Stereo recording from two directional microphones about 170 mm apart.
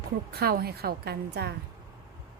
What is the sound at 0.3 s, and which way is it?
A woman's voice, 65° right (ahead or behind).